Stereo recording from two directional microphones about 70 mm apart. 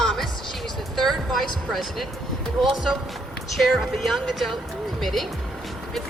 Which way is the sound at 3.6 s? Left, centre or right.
Centre.